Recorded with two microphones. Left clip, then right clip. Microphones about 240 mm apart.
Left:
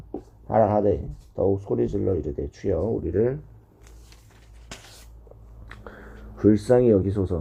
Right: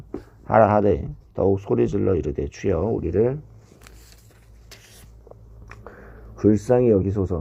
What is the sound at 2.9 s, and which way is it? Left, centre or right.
Speech, centre.